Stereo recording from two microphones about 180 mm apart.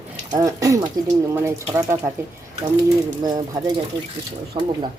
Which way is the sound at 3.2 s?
20° right (ahead or behind).